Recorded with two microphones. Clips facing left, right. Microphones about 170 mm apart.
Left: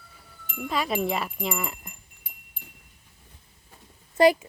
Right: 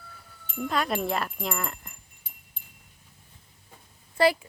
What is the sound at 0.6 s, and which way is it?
Speech, centre (ahead or behind).